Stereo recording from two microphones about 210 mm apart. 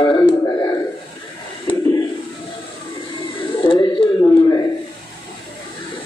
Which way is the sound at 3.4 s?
25° left (ahead or behind).